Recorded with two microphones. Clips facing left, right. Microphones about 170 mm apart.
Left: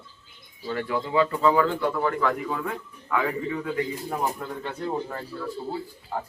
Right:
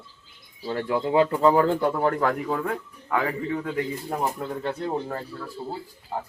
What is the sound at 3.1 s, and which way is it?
Speech, 35° right (ahead or behind).